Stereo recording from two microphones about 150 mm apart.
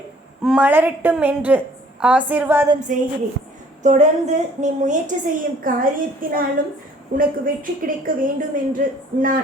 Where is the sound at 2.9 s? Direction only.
55° right (ahead or behind); by 6.6 s 75° right (ahead or behind).